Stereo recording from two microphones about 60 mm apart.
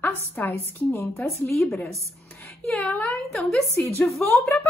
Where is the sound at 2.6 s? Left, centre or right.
Centre.